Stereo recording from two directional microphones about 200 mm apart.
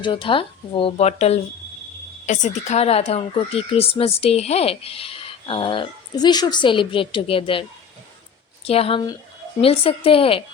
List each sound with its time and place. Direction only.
0.0 s speech: 25° left (ahead or behind)
8.6 s speech: 30° left (ahead or behind)